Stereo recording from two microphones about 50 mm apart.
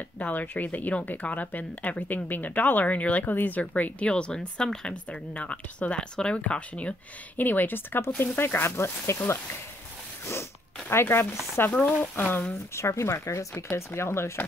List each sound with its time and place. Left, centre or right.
0.2 s speech: left
4.1 s speech: left
7.3 s speech: left
10.9 s speech: left
12.7 s speech: left